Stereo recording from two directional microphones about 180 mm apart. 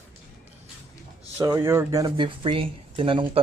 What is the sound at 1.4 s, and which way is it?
Speech, 15° right (ahead or behind).